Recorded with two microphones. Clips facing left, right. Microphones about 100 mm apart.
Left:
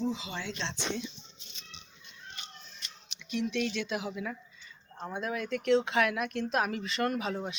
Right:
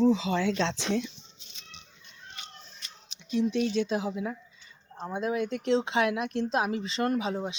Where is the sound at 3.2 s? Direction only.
30° right (ahead or behind).